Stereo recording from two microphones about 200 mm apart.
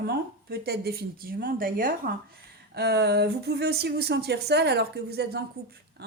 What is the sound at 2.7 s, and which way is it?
Speech, 55° right (ahead or behind).